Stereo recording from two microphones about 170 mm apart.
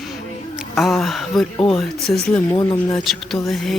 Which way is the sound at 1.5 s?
30° left (ahead or behind).